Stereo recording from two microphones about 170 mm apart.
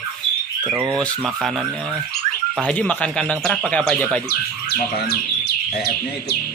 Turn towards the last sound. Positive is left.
turn(degrees=65)  # may be behind; listen again after turning